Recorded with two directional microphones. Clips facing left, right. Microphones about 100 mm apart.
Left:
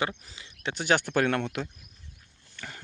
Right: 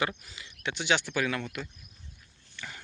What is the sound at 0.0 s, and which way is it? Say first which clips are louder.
Speech: left 1 dB; 30° left (ahead or behind).